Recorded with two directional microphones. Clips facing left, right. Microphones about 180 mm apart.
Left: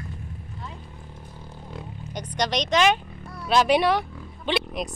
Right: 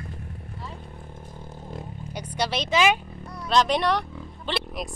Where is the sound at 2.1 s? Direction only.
10° right (ahead or behind).